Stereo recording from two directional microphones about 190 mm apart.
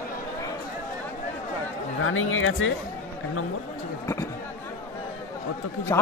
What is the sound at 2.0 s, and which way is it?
Speech, 90° left.